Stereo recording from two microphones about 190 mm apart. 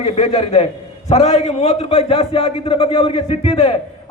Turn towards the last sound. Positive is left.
turn(degrees=30)  # may be behind; listen again after turning